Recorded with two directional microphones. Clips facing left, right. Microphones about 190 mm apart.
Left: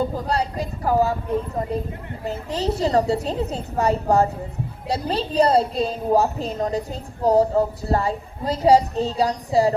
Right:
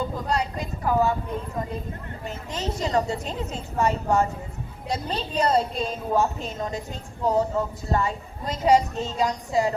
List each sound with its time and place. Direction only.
0.0 s a woman's voice: 35° left (ahead or behind)
2.2 s a woman's voice: 35° left (ahead or behind)